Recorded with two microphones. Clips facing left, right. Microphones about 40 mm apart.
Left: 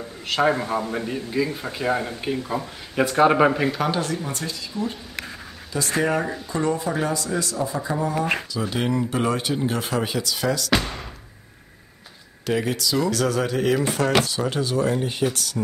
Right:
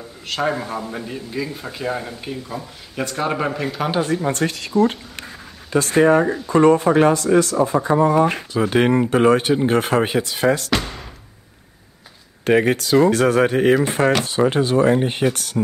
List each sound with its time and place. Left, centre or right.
0.3 s a man's voice: centre
3.9 s speech: right
4.2 s speech: right
5.9 s speech: right
6.2 s speech: centre
6.5 s speech: right
12.4 s speech: right